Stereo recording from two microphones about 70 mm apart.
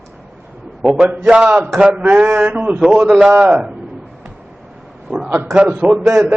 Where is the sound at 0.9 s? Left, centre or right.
Centre.